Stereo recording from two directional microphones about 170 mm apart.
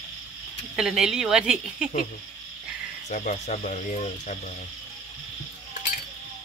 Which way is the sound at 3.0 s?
45° left (ahead or behind).